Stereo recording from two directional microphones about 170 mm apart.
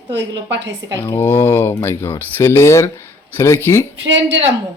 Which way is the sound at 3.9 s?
90° right.